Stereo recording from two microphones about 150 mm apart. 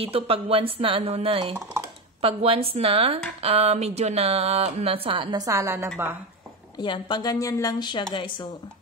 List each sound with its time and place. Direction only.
0.0 s speech: 40° right (ahead or behind); by 5.9 s 20° right (ahead or behind)
6.8 s a woman's voice: 30° left (ahead or behind)